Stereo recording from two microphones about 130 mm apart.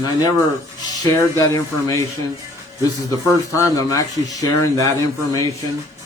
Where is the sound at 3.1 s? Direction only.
25° left (ahead or behind).